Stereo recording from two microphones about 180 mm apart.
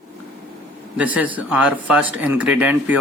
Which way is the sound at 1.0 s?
5° right (ahead or behind).